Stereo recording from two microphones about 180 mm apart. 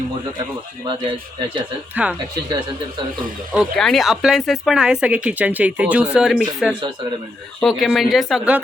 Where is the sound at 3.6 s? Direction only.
Centre (ahead or behind).